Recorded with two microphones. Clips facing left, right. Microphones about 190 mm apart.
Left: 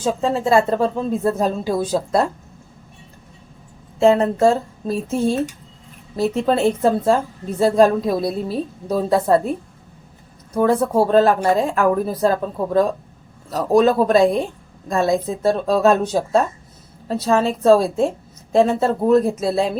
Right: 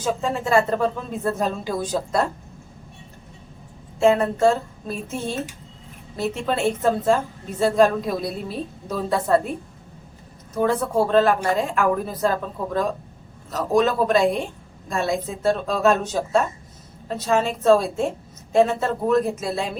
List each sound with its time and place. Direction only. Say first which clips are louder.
0.0 s a woman's voice: left 4 dB; 30° left (ahead or behind)
4.0 s a woman's voice: left 3 dB; 35° left (ahead or behind)
10.5 s a woman's voice: left 4 dB; 35° left (ahead or behind)